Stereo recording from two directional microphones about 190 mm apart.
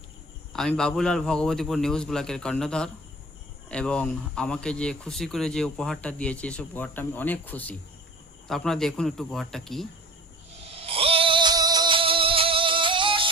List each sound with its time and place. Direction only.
0.5 s speech: 5° left (ahead or behind)
10.7 s music: 30° right (ahead or behind)